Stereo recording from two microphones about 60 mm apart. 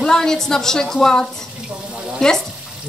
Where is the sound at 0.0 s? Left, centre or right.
Centre.